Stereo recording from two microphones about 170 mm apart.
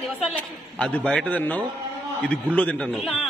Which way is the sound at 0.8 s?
5° left (ahead or behind).